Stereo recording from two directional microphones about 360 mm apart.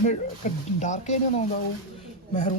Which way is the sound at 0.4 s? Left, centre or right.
Left.